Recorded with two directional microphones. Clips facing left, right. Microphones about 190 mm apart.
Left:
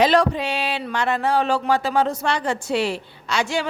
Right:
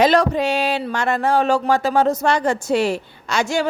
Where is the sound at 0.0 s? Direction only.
45° right (ahead or behind).